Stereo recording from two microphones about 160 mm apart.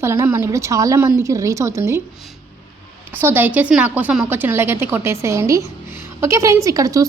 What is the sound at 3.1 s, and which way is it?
Speech, 10° right (ahead or behind).